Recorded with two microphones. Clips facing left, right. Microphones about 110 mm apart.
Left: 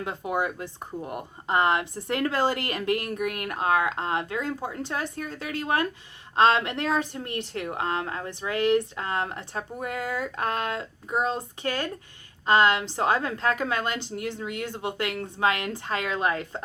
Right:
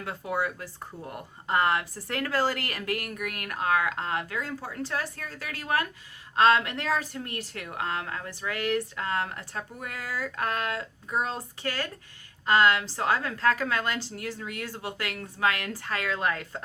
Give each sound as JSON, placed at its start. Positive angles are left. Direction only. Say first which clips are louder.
{"t": 0.0, "sound": "a woman's voice", "louder": "left 2 dB", "side_deg": 20}